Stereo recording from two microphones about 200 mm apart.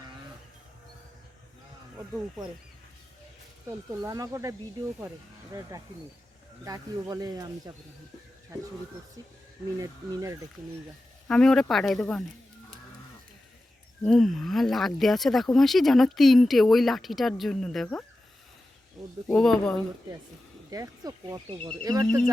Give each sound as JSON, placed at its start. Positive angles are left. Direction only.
{"t": 3.7, "sound": "speech", "side_deg": -15}
{"t": 9.8, "sound": "speech", "side_deg": -15}
{"t": 11.3, "sound": "speech", "side_deg": 0}
{"t": 14.0, "sound": "speech", "side_deg": 0}
{"t": 19.3, "sound": "speech", "side_deg": 5}
{"t": 20.7, "sound": "speech", "side_deg": -15}